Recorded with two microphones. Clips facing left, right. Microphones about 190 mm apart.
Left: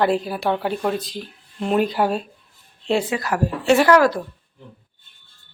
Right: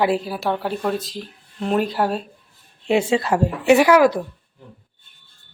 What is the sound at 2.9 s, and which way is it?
Speech, 25° right (ahead or behind).